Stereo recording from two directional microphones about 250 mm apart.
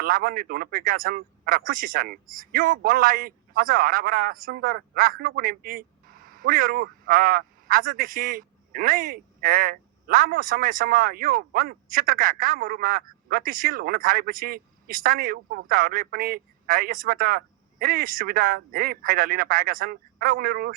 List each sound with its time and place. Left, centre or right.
0.0 s a man's voice: right